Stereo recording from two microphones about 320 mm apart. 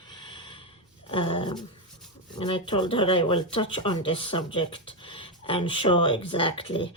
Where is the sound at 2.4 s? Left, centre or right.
Centre.